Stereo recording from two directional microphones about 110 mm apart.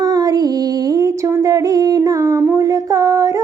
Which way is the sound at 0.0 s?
35° right (ahead or behind).